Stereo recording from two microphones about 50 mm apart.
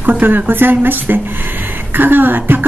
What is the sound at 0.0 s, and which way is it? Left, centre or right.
A woman's voice, right.